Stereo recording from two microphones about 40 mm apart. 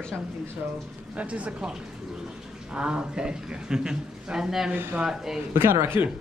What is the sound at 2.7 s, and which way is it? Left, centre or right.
Speech, right.